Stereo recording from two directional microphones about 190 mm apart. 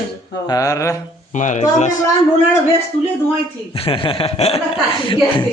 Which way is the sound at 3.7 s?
30° left (ahead or behind).